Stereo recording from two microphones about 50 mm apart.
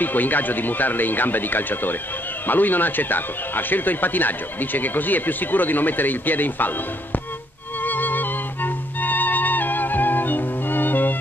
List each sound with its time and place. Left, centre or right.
0.0 s speech: left
7.8 s music: left